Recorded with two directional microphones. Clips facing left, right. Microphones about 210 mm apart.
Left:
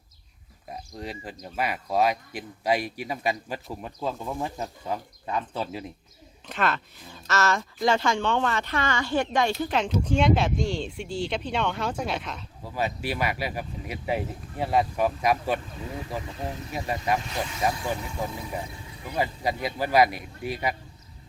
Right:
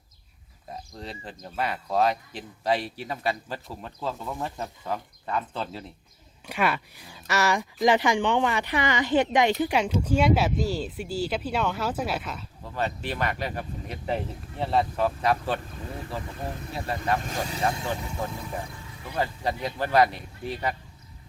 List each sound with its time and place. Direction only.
0.9 s speech: 10° left (ahead or behind)
6.5 s speech: 10° right (ahead or behind)
12.6 s speech: 10° left (ahead or behind)
16.7 s speech: 15° left (ahead or behind)
17.2 s speech: 45° right (ahead or behind)
17.8 s speech: 10° left (ahead or behind)